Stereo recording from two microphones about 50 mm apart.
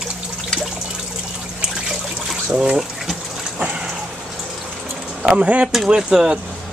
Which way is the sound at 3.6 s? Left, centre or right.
Centre.